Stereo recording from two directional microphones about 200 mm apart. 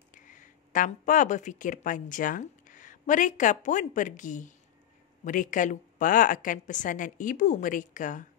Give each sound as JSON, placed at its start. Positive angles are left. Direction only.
{"t": 0.1, "sound": "a woman's voice", "side_deg": 40}